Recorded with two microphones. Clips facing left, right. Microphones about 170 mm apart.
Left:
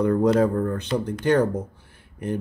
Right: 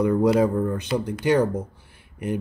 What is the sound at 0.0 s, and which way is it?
Speech, 10° right (ahead or behind).